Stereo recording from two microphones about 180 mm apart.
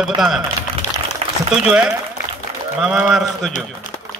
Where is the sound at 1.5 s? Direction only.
5° right (ahead or behind).